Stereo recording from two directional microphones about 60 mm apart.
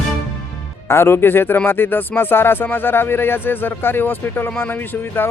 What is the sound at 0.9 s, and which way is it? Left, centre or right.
Speech, left.